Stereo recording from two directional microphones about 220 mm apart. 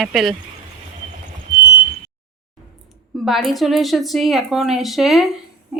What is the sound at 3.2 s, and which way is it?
Speech, centre (ahead or behind).